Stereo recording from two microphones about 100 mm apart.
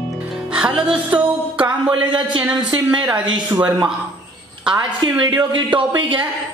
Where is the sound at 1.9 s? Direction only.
55° right (ahead or behind).